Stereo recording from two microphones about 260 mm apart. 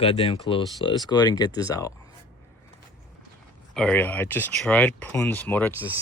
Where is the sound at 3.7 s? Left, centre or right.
Centre.